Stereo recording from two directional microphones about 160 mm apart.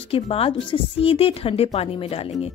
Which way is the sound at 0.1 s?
35° left (ahead or behind).